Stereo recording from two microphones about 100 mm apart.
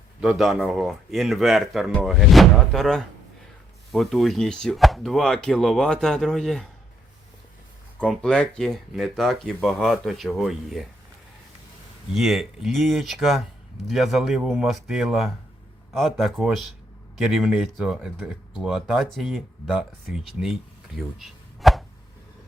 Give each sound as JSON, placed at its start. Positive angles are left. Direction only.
{"t": 0.2, "sound": "speech", "side_deg": -5}
{"t": 8.0, "sound": "speech", "side_deg": 5}
{"t": 12.1, "sound": "speech", "side_deg": 0}